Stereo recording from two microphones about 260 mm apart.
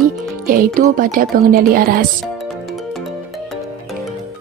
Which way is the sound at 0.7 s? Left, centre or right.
Right.